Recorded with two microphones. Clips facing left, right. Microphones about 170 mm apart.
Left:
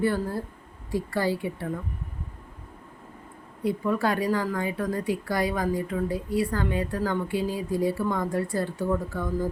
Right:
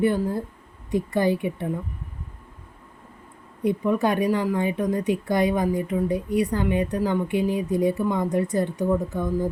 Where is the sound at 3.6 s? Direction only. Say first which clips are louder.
Right 3 dB; 20° right (ahead or behind).